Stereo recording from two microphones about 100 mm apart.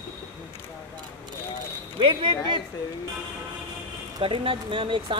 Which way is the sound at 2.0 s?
55° right (ahead or behind).